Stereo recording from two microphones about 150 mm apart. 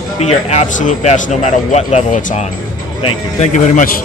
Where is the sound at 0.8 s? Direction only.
55° left (ahead or behind).